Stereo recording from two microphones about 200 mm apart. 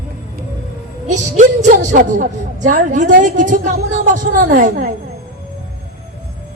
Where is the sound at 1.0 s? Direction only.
35° right (ahead or behind).